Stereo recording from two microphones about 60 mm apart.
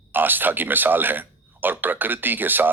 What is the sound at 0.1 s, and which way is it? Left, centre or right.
A man's voice, right.